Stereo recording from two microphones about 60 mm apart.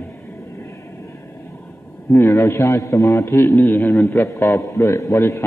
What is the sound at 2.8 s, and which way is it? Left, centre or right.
Speech, left.